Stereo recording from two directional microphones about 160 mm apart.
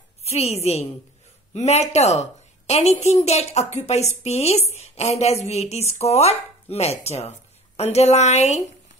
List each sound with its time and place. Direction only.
0.2 s a woman's voice: 40° left (ahead or behind)